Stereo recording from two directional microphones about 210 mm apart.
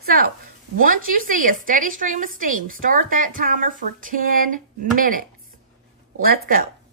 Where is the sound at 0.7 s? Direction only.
40° right (ahead or behind).